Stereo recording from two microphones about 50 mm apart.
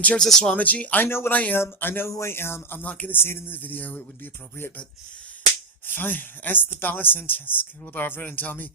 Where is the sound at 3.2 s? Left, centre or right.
Left.